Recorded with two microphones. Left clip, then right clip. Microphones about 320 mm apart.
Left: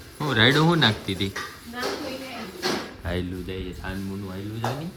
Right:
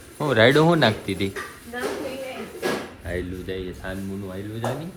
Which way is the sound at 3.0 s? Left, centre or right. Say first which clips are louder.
Right 1 dB; centre.